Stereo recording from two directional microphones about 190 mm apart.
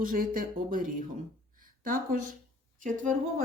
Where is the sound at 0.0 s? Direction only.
45° right (ahead or behind).